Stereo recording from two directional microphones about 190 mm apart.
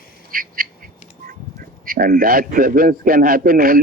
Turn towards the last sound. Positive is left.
turn(degrees=-50)  # may be behind; listen again after turning